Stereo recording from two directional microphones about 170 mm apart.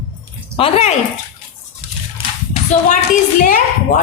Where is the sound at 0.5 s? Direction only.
35° left (ahead or behind).